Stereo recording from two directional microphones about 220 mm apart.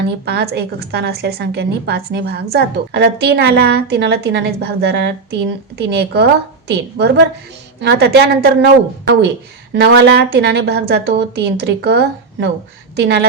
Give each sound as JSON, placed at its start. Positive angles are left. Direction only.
{"t": 0.3, "sound": "a woman's voice", "side_deg": -50}